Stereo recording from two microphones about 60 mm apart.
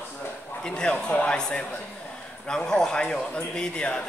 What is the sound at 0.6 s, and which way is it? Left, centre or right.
A man's voice, centre.